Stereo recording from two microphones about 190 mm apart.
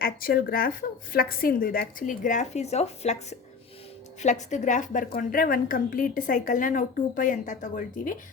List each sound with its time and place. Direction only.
0.0 s a woman's voice: 50° left (ahead or behind)